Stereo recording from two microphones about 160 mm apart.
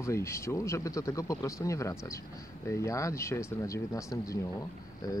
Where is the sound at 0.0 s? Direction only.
15° left (ahead or behind).